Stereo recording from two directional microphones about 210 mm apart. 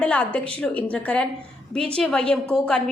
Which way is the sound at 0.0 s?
5° left (ahead or behind).